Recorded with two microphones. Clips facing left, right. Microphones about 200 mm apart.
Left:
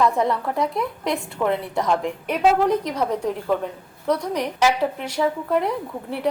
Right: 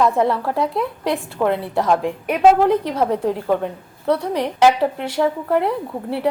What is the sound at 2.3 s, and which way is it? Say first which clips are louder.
A woman's voice: right 5 dB; 60° right (ahead or behind).